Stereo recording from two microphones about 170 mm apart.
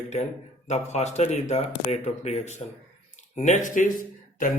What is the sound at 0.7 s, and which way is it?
A man's voice, 40° left (ahead or behind).